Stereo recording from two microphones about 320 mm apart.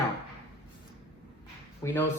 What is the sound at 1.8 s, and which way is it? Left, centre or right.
Speech, centre.